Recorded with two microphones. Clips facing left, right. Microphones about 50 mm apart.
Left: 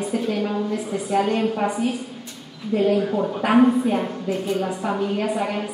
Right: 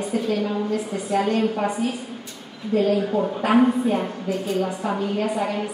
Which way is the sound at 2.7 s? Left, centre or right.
Left.